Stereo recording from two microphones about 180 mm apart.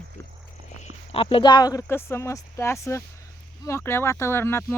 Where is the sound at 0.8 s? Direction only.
30° left (ahead or behind).